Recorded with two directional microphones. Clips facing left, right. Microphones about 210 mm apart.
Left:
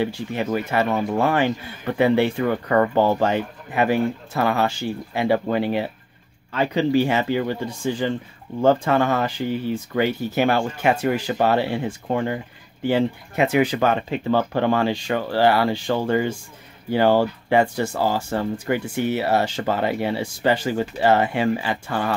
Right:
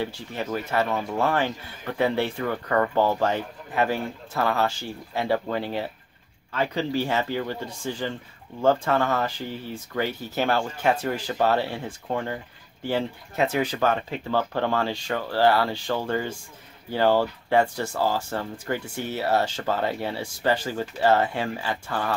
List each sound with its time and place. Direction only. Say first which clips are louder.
0.0 s speech: left 6 dB; 15° left (ahead or behind)